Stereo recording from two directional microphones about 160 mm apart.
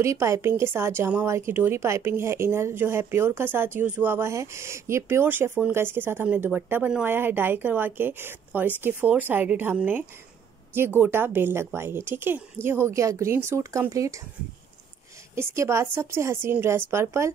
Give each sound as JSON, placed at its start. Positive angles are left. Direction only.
{"t": 0.0, "sound": "a woman's voice", "side_deg": -20}
{"t": 15.3, "sound": "a woman's voice", "side_deg": -15}